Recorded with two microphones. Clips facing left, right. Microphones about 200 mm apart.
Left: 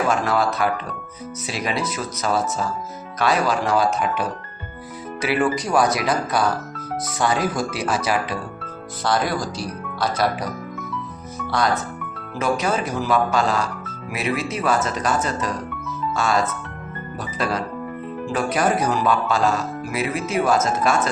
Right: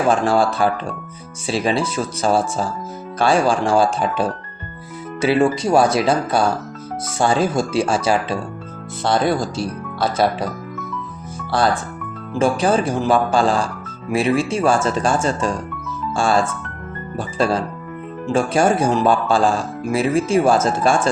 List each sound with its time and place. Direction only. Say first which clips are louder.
0.1 s speech: right 4 dB; 30° right (ahead or behind)
11.5 s speech: right 3 dB; 30° right (ahead or behind)